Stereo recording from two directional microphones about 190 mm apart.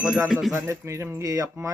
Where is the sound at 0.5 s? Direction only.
15° right (ahead or behind).